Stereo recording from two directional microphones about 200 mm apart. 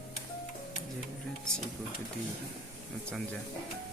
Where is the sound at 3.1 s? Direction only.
5° left (ahead or behind).